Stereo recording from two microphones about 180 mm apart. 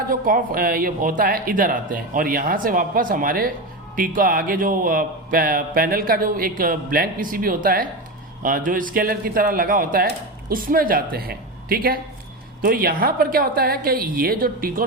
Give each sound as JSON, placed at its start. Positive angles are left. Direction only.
{"t": 0.1, "sound": "a man's voice", "side_deg": -50}